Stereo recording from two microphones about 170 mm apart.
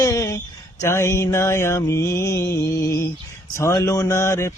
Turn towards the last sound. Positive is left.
turn(degrees=15)  # may be behind; listen again after turning